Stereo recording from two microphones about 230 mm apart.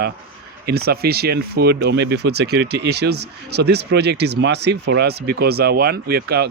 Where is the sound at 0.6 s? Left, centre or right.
Right.